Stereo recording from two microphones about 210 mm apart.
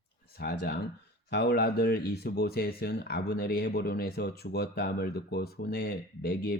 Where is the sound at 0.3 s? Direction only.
50° left (ahead or behind).